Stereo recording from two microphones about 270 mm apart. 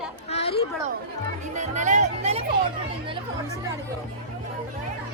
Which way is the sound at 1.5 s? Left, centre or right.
Right.